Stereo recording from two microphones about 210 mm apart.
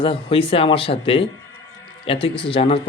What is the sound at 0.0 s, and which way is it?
A man's voice, 25° left (ahead or behind).